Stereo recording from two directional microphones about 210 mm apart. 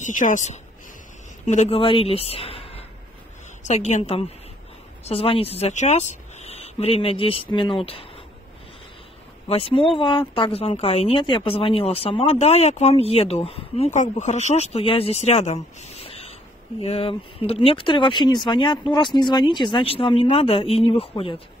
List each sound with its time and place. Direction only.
0.0 s a woman's voice: 35° left (ahead or behind)
9.5 s speech: 25° left (ahead or behind)